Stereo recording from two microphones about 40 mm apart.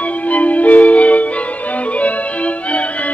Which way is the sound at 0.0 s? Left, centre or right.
Left.